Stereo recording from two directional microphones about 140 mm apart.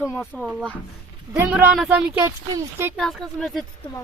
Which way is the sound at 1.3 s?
15° right (ahead or behind).